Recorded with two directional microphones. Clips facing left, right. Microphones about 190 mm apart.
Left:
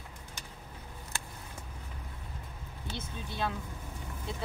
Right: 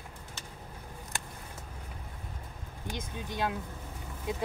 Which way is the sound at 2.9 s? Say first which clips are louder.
Right 3 dB; 15° right (ahead or behind).